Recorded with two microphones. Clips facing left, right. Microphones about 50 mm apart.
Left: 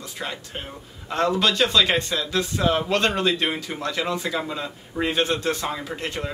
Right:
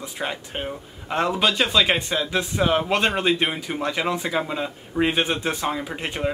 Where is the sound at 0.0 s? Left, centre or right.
Right.